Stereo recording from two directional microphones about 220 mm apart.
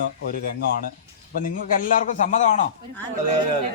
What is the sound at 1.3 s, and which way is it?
A man's voice, 40° left (ahead or behind).